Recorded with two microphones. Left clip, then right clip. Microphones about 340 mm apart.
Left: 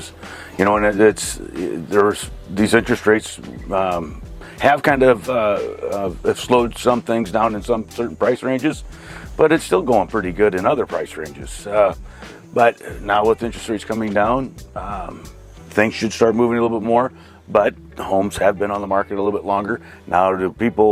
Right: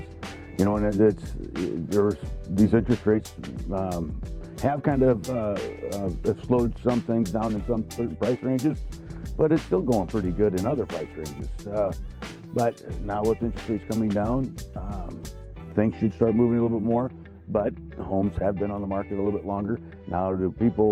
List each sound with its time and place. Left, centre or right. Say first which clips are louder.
0.2 s music: left 2 dB; centre
0.6 s speech: left 9 dB; centre
6.0 s speech: left 7 dB; centre
8.2 s speech: left 8 dB; centre
11.6 s speech: left 11 dB; centre